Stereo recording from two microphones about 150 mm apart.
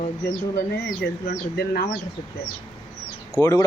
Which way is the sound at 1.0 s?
90° left.